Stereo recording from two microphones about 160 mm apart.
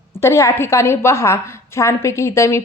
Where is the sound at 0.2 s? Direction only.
20° left (ahead or behind).